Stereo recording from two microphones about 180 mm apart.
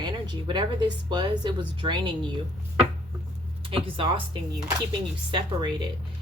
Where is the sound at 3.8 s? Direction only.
30° right (ahead or behind).